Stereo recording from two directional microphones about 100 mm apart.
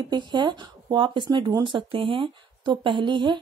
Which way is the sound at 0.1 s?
50° right (ahead or behind).